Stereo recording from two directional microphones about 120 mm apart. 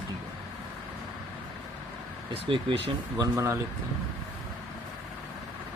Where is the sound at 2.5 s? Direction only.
45° right (ahead or behind).